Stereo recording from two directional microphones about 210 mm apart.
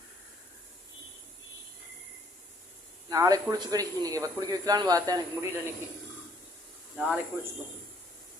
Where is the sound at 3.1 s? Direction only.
15° right (ahead or behind).